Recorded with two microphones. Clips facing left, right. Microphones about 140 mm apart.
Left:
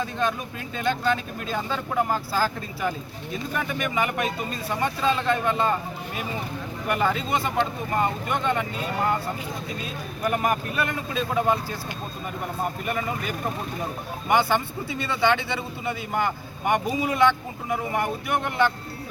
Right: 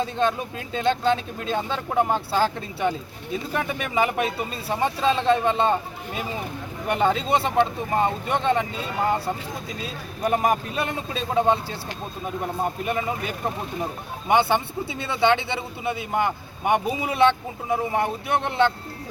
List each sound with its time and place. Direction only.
0.0 s speech: 25° right (ahead or behind)
3.9 s a man's voice: 30° right (ahead or behind)
6.9 s speech: 30° right (ahead or behind)
10.2 s speech: 30° right (ahead or behind)
12.8 s speech: 20° right (ahead or behind)